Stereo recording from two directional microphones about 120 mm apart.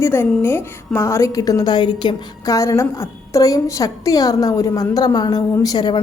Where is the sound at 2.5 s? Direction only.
25° left (ahead or behind).